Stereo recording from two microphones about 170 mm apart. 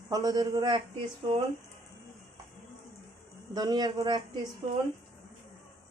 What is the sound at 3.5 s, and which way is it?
Speech, 25° right (ahead or behind).